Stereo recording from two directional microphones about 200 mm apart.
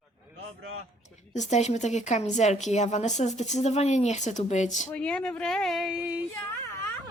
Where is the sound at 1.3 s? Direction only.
35° left (ahead or behind).